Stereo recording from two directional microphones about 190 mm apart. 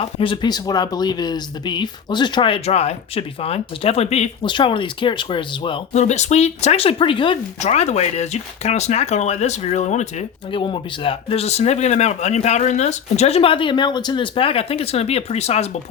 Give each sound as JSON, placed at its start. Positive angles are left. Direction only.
{"t": 0.0, "sound": "speech", "side_deg": 30}
{"t": 10.6, "sound": "speech", "side_deg": 25}